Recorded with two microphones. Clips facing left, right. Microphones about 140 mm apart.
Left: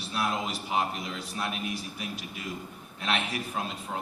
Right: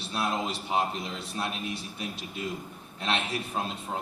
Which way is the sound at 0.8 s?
25° right (ahead or behind).